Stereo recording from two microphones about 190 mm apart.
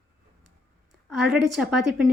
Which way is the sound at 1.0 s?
Centre (ahead or behind).